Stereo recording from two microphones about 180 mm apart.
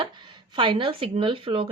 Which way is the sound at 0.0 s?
25° right (ahead or behind).